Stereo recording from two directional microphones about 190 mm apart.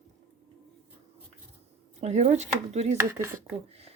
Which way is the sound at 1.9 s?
35° right (ahead or behind).